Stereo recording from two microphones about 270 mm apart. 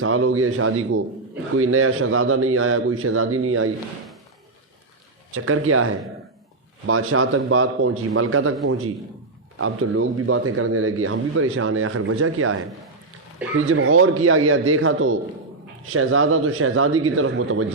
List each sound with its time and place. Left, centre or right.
0.0 s a man's voice: right
5.3 s a man's voice: right
9.6 s a man's voice: right
13.7 s a man's voice: right